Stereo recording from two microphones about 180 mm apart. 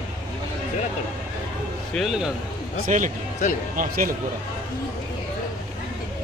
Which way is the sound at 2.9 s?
45° right (ahead or behind).